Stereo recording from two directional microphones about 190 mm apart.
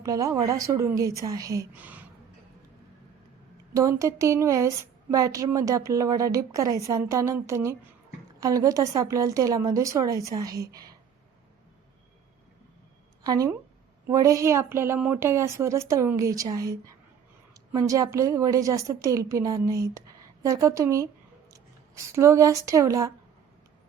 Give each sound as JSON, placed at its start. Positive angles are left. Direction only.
{"t": 0.0, "sound": "a woman's voice", "side_deg": -15}
{"t": 3.8, "sound": "a woman's voice", "side_deg": -15}
{"t": 13.2, "sound": "a woman's voice", "side_deg": -20}